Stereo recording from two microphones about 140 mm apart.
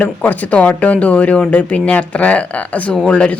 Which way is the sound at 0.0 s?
10° left (ahead or behind).